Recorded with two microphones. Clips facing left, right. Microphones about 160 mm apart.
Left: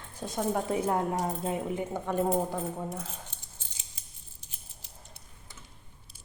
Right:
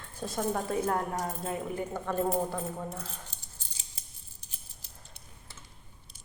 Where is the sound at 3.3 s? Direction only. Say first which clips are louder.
Even; 35° right (ahead or behind).